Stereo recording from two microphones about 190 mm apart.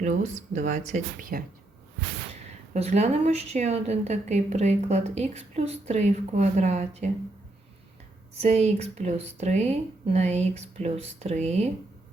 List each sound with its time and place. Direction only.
0.0 s a woman's voice: 40° right (ahead or behind)
2.7 s a woman's voice: 35° right (ahead or behind)
8.4 s a woman's voice: 35° right (ahead or behind)